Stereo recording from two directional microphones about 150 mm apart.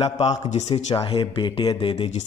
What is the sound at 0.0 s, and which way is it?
Speech, 45° left (ahead or behind).